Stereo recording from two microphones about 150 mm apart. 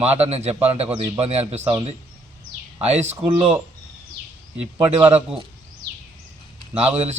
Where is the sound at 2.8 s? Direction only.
45° right (ahead or behind).